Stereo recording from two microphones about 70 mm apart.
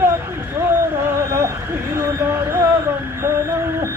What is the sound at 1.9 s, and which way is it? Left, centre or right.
Speech, right.